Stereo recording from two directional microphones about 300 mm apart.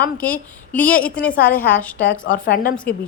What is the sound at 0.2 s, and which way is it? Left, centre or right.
A woman's voice, centre.